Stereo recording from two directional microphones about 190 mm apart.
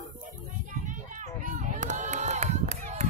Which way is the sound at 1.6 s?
40° right (ahead or behind).